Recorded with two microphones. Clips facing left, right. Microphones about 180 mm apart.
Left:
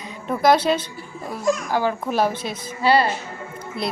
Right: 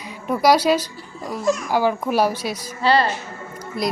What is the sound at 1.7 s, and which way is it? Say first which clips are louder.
Speech: right 2 dB; 10° right (ahead or behind).